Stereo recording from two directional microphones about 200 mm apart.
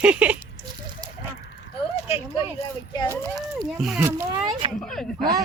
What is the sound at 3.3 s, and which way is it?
Speech, centre (ahead or behind).